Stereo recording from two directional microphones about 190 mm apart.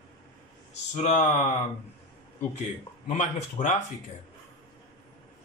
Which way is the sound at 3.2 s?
40° left (ahead or behind).